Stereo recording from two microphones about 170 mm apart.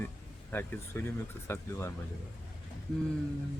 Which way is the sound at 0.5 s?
15° left (ahead or behind).